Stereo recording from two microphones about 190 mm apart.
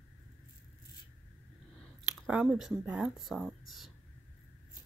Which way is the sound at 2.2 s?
5° right (ahead or behind).